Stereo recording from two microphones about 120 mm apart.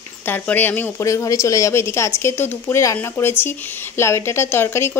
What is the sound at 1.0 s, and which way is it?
A woman's voice, 25° left (ahead or behind).